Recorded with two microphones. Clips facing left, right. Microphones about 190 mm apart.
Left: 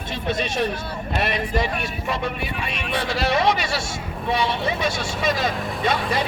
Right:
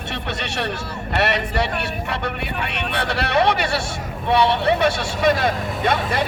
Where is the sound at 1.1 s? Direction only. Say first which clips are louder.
Right 3 dB; 70° right (ahead or behind).